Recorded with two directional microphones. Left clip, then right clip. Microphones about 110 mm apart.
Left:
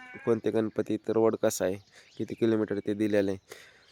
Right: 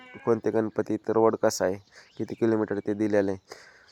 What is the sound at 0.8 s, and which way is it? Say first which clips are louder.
Speech: right 2 dB; 40° left (ahead or behind).